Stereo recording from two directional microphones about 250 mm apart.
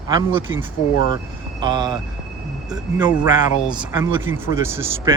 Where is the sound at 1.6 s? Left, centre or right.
Centre.